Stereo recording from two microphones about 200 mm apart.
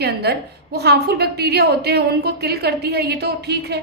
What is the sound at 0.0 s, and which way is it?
A woman's voice, 55° right (ahead or behind).